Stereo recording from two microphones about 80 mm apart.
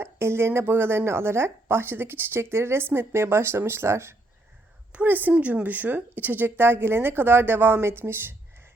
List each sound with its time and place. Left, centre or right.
0.0 s a woman's voice: right
4.9 s a woman's voice: centre